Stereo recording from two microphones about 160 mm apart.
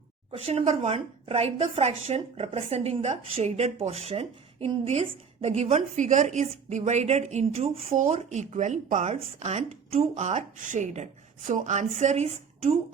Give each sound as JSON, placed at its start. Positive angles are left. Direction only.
{"t": 0.3, "sound": "a woman's voice", "side_deg": -40}
{"t": 6.0, "sound": "speech", "side_deg": -50}
{"t": 7.9, "sound": "speech", "side_deg": -50}